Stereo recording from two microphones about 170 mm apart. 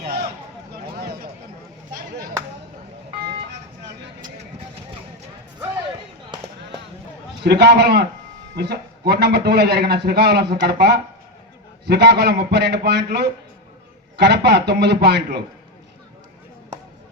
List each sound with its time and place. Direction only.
0.0 s a sound: 65° right (ahead or behind)
3.5 s vehicle: 90° right
7.4 s a man's voice: 75° right (ahead or behind)